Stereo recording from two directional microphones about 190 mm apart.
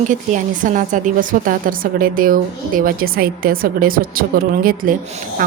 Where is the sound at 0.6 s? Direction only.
45° right (ahead or behind).